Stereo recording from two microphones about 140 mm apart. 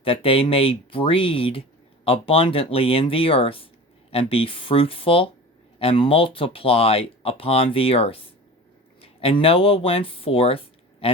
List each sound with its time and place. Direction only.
0.0 s speech: 40° left (ahead or behind)